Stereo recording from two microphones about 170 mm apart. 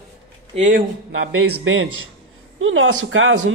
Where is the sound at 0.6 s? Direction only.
50° right (ahead or behind).